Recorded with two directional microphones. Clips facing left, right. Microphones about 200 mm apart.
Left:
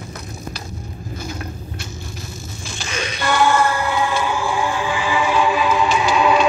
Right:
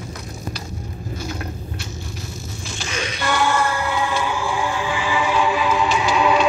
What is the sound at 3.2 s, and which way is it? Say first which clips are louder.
Music: left 4 dB; 50° left (ahead or behind).